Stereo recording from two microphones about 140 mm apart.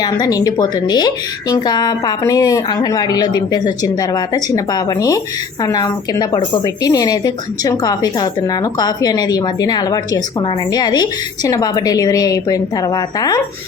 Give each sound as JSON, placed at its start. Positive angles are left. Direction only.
{"t": 0.0, "sound": "a woman's voice", "side_deg": 25}